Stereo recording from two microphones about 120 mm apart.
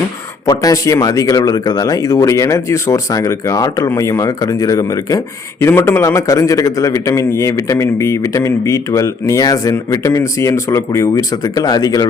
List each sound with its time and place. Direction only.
0.4 s a man's voice: 30° left (ahead or behind)
5.5 s a man's voice: 20° left (ahead or behind)